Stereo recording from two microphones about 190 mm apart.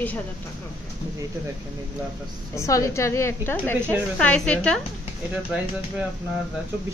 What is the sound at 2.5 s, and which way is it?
A woman's voice, 15° left (ahead or behind).